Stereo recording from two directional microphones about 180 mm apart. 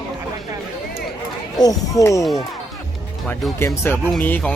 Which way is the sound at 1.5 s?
20° left (ahead or behind).